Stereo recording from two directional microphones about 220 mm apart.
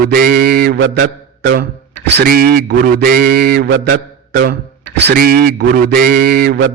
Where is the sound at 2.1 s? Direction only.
45° right (ahead or behind).